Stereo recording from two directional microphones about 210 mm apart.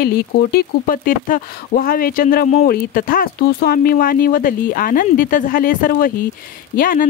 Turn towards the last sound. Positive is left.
turn(degrees=40)  # may be behind; listen again after turning